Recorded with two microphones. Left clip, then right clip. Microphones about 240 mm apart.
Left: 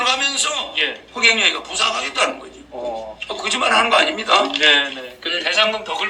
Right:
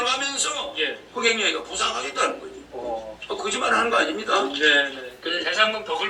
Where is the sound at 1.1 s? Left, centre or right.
Left.